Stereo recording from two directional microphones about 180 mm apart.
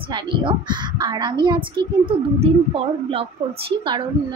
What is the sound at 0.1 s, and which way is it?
A woman's voice, 25° right (ahead or behind).